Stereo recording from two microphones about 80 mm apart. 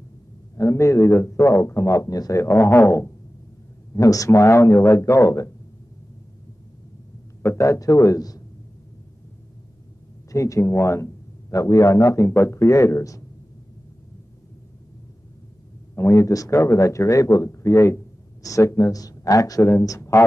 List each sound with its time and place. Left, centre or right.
0.6 s speech: left
2.4 s speech: left
3.9 s speech: left
7.4 s a man's voice: left
10.3 s speech: left
15.9 s speech: left